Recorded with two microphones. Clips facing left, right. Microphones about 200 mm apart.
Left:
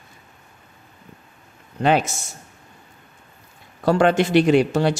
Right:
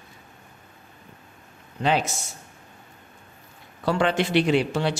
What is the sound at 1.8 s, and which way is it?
Speech, 55° left (ahead or behind).